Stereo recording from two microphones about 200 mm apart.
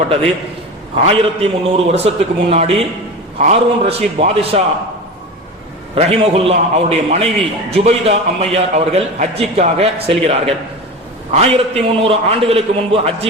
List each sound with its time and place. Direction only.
1.0 s a man's voice: 30° right (ahead or behind)
5.9 s a man's voice: 30° right (ahead or behind)